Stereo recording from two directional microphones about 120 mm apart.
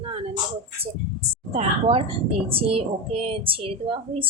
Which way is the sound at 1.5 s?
50° right (ahead or behind).